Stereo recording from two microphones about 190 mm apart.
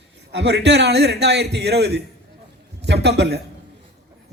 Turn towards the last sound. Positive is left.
turn(degrees=-60)  # may be behind; listen again after turning